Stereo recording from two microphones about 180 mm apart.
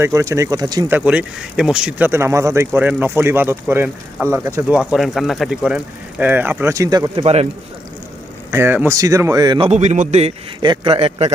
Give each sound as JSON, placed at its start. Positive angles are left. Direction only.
{"t": 0.0, "sound": "speech", "side_deg": -15}
{"t": 0.9, "sound": "speech", "side_deg": -10}
{"t": 7.2, "sound": "a man's voice", "side_deg": -35}
{"t": 8.4, "sound": "a man's voice", "side_deg": -15}